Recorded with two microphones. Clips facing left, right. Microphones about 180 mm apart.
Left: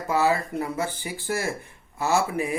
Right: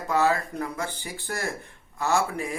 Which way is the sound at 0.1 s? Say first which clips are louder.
Left 1 dB; 15° left (ahead or behind).